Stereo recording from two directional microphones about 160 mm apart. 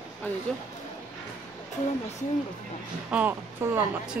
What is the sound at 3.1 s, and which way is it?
Speech, 10° right (ahead or behind).